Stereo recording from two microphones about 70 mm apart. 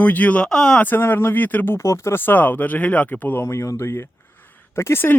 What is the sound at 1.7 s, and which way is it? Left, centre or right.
Speech, left.